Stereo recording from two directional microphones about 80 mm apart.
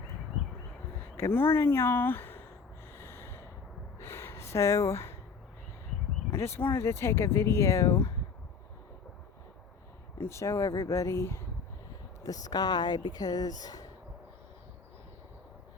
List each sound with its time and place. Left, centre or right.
1.1 s speech: left
2.9 s snort: left
4.0 s a sound: left
6.3 s speech: left
10.2 s speech: left
12.2 s speech: left